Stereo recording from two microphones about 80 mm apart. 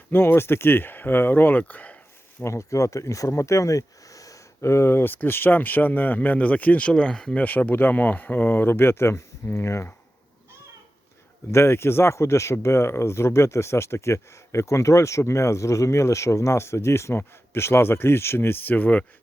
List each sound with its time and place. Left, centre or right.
0.1 s speech: left
2.4 s speech: left; by 7.4 s centre
7.4 s speech: left
11.5 s speech: left